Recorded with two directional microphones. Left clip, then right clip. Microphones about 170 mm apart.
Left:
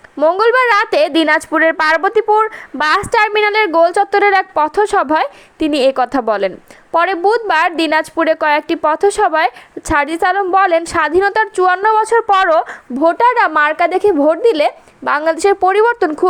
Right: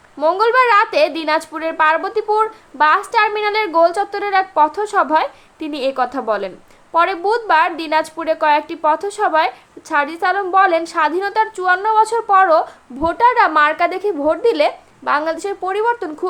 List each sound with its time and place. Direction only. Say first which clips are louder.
0.2 s a woman's voice: left 2 dB; 35° left (ahead or behind)